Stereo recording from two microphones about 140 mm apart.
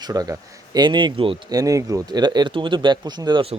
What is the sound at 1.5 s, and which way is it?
Speech, 25° right (ahead or behind).